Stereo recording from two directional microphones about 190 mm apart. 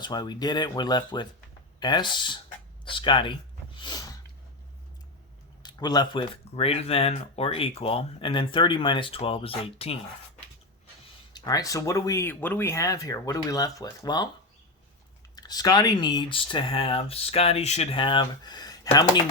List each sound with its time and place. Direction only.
0.0 s speech: 20° left (ahead or behind)
3.8 s snort: 20° left (ahead or behind)
5.6 s speech: 20° left (ahead or behind)
11.3 s speech: 20° left (ahead or behind)
15.4 s speech: 20° left (ahead or behind)